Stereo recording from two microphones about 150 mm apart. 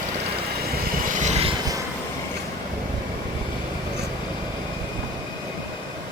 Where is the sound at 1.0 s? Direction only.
55° right (ahead or behind).